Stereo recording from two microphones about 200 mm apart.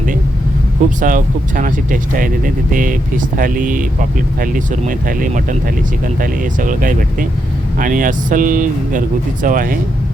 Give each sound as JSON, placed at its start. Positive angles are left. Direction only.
{"t": 0.9, "sound": "speech", "side_deg": -40}